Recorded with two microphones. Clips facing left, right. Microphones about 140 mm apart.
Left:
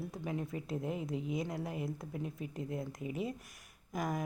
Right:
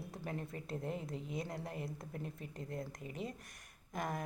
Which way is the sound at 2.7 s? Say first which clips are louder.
Left 2 dB; 20° left (ahead or behind).